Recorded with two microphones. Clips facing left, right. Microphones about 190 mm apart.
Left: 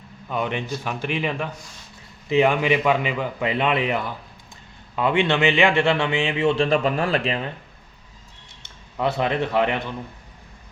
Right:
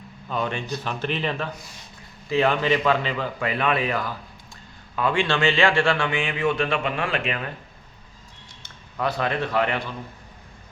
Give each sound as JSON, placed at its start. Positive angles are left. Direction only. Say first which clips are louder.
{"t": 0.3, "sound": "a man's voice", "louder": "left 1 dB", "side_deg": 15}
{"t": 8.6, "sound": "speech", "louder": "left 3 dB", "side_deg": 25}